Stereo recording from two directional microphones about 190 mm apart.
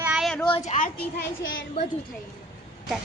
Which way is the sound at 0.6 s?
40° left (ahead or behind).